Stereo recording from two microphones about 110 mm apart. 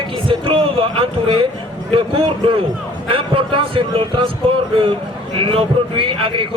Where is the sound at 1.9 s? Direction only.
55° right (ahead or behind).